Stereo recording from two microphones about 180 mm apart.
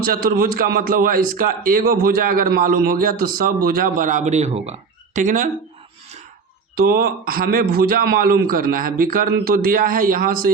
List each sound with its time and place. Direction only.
0.0 s a man's voice: 55° right (ahead or behind)
6.7 s a man's voice: 55° right (ahead or behind)